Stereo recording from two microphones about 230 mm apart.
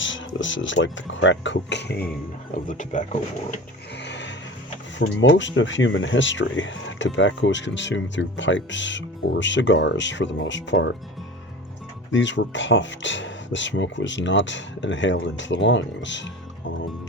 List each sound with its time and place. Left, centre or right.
0.0 s speech: left
2.6 s speech: left
3.9 s vehicle: left
5.3 s speech: left
12.1 s speech: left